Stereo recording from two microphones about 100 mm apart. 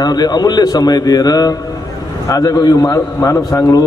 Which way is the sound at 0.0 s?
40° left (ahead or behind).